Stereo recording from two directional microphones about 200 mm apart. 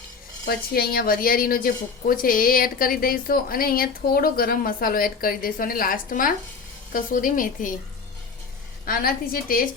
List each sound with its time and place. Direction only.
0.4 s a woman's voice: 50° left (ahead or behind)
8.9 s a woman's voice: 45° left (ahead or behind)